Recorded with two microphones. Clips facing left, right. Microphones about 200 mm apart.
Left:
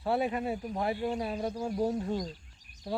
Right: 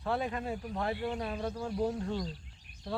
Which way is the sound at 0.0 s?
10° left (ahead or behind).